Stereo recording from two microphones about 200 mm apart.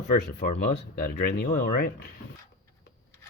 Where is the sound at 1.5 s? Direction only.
50° left (ahead or behind).